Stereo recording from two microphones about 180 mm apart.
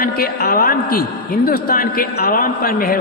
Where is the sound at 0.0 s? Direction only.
55° left (ahead or behind).